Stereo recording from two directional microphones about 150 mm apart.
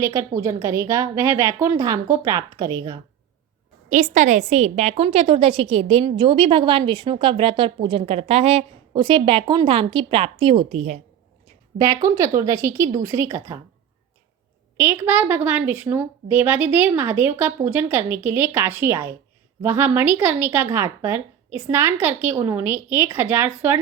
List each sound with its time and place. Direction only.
0.0 s a woman's voice: 20° right (ahead or behind)
3.8 s a woman's voice: 55° right (ahead or behind)
11.8 s a woman's voice: 25° right (ahead or behind)
14.8 s a woman's voice: 15° right (ahead or behind)